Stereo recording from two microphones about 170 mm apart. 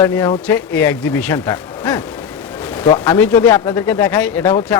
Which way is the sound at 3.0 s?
10° left (ahead or behind).